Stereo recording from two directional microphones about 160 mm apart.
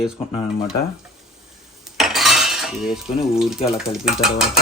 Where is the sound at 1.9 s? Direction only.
Centre (ahead or behind).